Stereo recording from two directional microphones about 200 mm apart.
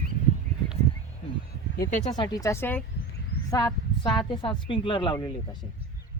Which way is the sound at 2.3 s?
15° left (ahead or behind).